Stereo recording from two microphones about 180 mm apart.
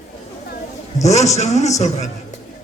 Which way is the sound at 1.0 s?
40° left (ahead or behind).